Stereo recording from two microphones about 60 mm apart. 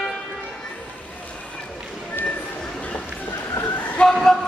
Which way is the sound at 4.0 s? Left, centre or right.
Centre.